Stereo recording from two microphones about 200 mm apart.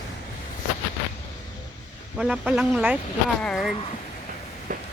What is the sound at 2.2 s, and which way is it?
Speech, 5° right (ahead or behind).